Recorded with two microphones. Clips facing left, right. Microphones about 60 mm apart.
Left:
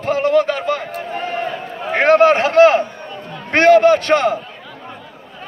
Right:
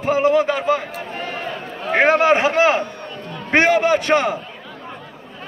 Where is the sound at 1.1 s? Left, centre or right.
Centre.